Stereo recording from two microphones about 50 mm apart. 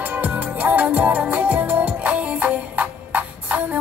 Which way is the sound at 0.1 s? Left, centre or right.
Right.